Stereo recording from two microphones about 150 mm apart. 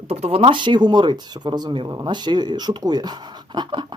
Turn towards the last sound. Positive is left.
turn(degrees=-30)  # may be behind; listen again after turning